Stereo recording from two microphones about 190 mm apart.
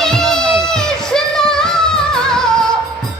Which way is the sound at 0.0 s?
Centre (ahead or behind).